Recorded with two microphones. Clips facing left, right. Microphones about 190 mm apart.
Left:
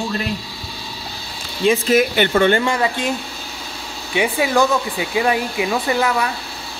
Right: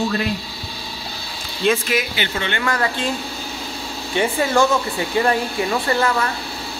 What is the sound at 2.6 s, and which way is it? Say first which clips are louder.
Speech: left 2 dB; 15° left (ahead or behind).